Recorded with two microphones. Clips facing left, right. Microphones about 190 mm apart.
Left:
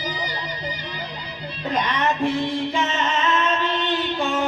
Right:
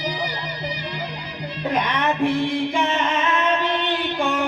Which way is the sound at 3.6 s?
15° right (ahead or behind).